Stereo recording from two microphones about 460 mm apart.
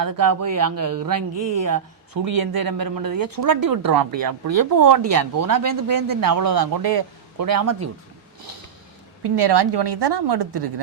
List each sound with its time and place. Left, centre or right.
0.0 s speech: right
7.6 s speech: right
9.2 s a woman's voice: right